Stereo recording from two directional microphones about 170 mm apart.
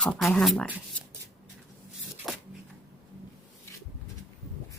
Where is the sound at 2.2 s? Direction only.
Centre (ahead or behind).